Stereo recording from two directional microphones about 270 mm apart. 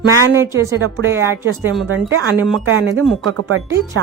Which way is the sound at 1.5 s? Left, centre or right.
Right.